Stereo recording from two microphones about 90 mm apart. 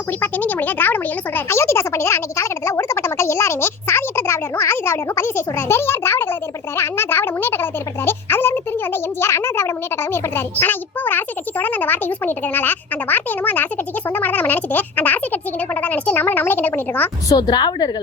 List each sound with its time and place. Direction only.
0.2 s a woman's voice: 20° left (ahead or behind)
14.1 s a sound: 20° left (ahead or behind)
17.2 s a woman's voice: 50° left (ahead or behind)